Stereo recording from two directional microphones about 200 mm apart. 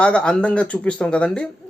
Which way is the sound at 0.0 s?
5° left (ahead or behind).